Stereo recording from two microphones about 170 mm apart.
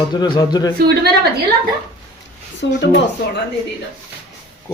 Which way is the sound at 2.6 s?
90° left.